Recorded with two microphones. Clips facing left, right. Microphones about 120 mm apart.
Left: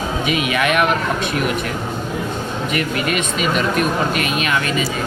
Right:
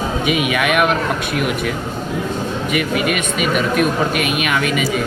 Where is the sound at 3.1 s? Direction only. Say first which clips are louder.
Right 1 dB; 5° right (ahead or behind).